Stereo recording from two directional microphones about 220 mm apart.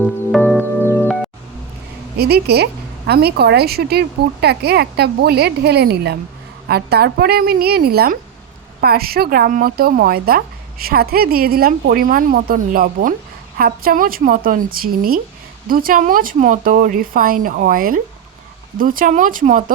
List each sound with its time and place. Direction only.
0.0 s music: 5° left (ahead or behind)
2.1 s speech: 45° right (ahead or behind)